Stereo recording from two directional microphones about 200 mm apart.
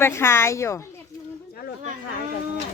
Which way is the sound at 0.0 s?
10° left (ahead or behind).